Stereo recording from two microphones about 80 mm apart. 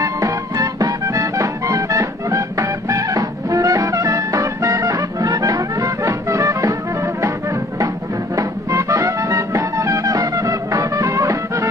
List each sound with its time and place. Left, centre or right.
0.0 s music: right
8.4 s music: right